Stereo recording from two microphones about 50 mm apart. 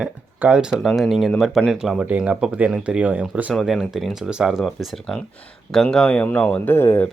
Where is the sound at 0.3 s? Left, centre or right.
Right.